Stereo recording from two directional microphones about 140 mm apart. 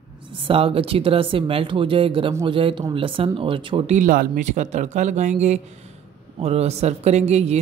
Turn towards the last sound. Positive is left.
turn(degrees=-50)  # may be behind; listen again after turning